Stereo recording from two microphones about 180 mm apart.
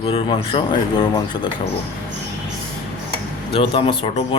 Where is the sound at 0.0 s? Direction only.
30° left (ahead or behind).